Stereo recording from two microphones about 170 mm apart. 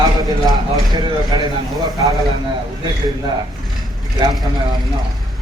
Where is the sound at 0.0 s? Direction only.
25° right (ahead or behind).